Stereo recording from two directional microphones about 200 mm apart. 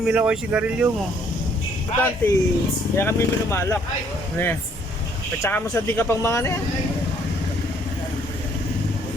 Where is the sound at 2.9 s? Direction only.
10° left (ahead or behind).